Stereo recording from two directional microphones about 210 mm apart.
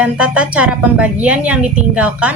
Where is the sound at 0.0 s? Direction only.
5° right (ahead or behind).